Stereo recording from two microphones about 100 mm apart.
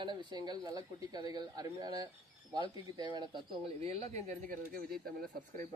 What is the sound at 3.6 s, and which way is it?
Speech, 90° right.